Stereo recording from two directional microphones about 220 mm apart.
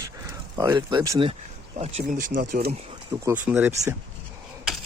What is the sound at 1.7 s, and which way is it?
Speech, 30° right (ahead or behind).